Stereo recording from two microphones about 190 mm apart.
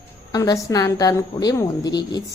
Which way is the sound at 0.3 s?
20° left (ahead or behind).